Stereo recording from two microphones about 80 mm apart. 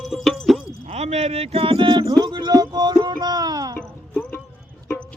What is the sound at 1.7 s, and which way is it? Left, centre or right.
Music, right.